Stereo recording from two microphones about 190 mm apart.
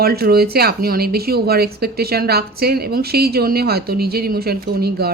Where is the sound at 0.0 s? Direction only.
55° right (ahead or behind).